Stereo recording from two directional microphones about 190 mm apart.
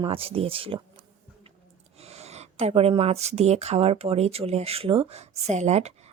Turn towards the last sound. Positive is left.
turn(degrees=-35)  # may be behind; listen again after turning